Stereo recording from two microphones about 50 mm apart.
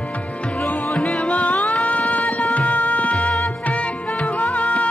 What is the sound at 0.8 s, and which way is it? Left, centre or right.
Music, centre.